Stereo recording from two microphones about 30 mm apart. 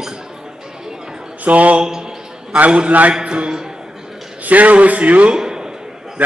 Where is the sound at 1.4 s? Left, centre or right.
Right.